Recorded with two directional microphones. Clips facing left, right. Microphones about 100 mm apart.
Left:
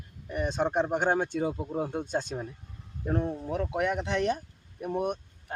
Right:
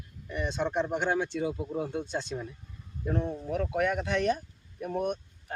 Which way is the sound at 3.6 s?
20° left (ahead or behind).